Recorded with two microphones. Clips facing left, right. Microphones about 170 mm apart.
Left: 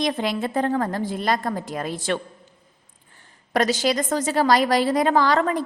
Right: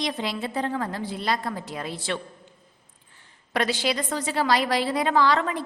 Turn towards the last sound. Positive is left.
turn(degrees=45)  # may be behind; listen again after turning